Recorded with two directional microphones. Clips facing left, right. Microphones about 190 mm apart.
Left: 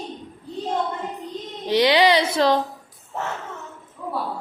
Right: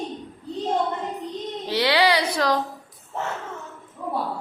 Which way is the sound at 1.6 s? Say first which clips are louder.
Left 4 dB; 20° left (ahead or behind).